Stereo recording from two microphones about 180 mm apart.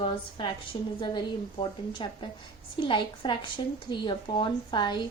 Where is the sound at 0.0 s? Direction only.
30° left (ahead or behind).